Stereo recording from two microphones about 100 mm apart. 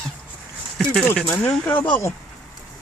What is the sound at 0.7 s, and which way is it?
Speech, centre (ahead or behind).